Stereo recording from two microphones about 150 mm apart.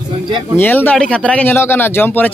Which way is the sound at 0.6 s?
15° left (ahead or behind).